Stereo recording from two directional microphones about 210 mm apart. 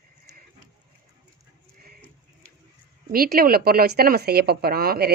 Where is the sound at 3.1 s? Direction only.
45° right (ahead or behind).